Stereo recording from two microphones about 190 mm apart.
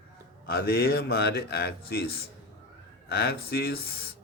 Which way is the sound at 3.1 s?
55° left (ahead or behind).